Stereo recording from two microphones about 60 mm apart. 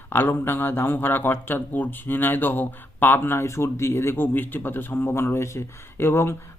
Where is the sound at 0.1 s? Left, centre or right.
Left.